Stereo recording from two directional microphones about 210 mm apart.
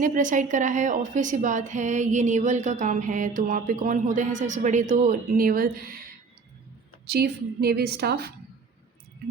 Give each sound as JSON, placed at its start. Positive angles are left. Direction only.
{"t": 0.0, "sound": "a woman's voice", "side_deg": -40}
{"t": 7.1, "sound": "a woman's voice", "side_deg": -50}